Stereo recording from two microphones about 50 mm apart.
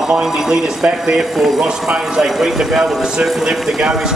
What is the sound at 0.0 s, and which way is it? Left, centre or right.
A man's voice, centre.